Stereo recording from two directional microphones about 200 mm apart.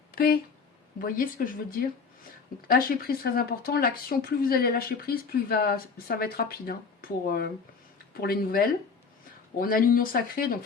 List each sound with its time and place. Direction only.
0.1 s a sound: 50° left (ahead or behind)
0.9 s speech: 45° left (ahead or behind)
2.6 s speech: 45° left (ahead or behind)